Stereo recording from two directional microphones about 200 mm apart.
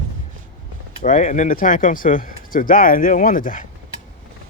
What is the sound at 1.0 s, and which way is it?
Speech, 40° left (ahead or behind).